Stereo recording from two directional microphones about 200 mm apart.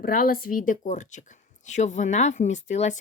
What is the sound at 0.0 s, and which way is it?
Speech, 45° left (ahead or behind).